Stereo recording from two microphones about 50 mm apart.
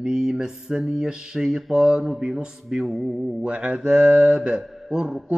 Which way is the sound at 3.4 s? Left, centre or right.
Right.